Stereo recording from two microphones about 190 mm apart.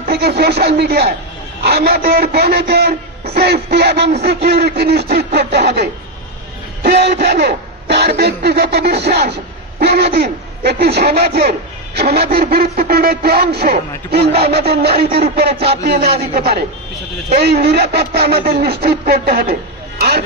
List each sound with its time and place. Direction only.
0.0 s speech: 55° right (ahead or behind)